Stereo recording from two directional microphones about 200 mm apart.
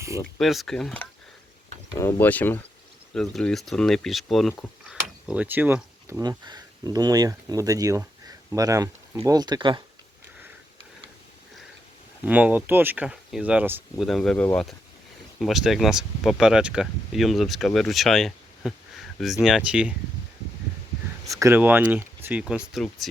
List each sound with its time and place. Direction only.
0.3 s speech: centre (ahead or behind); by 9.8 s 25° right (ahead or behind)
12.2 s speech: 5° right (ahead or behind)
14.0 s speech: centre (ahead or behind)
21.2 s speech: 15° right (ahead or behind)